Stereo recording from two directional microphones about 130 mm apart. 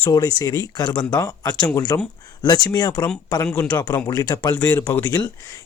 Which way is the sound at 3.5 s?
10° left (ahead or behind).